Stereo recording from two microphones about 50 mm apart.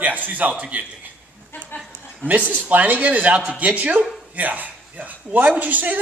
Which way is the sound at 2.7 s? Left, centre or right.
Right.